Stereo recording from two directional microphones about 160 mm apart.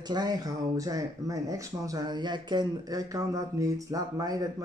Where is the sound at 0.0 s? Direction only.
25° right (ahead or behind).